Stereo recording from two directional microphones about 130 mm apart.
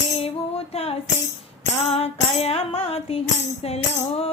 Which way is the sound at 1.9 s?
50° left (ahead or behind).